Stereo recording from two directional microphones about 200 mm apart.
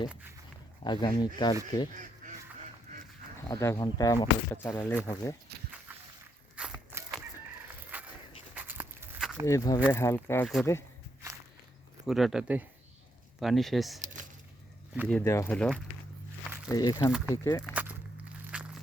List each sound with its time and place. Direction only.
0.1 s speech: 10° right (ahead or behind)
0.9 s speech: 25° left (ahead or behind)
3.3 s speech: 15° left (ahead or behind)
6.6 s a sound: 5° right (ahead or behind)
8.5 s goat: 10° right (ahead or behind)
9.5 s speech: 15° left (ahead or behind)
12.0 s speech: centre (ahead or behind)
14.0 s a sound: 40° right (ahead or behind)
15.1 s speech: 15° left (ahead or behind)
16.7 s speech: 20° left (ahead or behind)
17.1 s speech: 5° right (ahead or behind)
17.3 s speech: 15° left (ahead or behind)
17.6 s walk: 5° right (ahead or behind)
18.5 s a sound: 5° right (ahead or behind)